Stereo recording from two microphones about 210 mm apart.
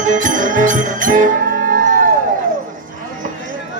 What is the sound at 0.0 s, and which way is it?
Music, 40° right (ahead or behind).